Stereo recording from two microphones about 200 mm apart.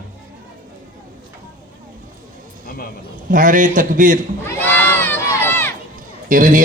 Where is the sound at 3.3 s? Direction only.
40° right (ahead or behind).